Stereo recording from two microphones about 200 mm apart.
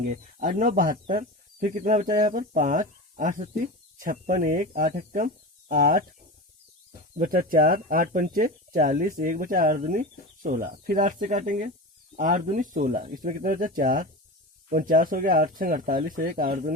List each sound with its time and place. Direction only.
0.0 s speech: 40° right (ahead or behind)
7.2 s speech: 45° right (ahead or behind)